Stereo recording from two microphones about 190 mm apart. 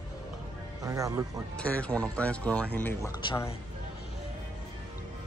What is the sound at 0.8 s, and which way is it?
Speech, 15° right (ahead or behind).